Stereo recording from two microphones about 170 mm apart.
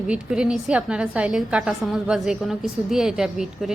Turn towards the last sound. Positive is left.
turn(degrees=-5)  # may be behind; listen again after turning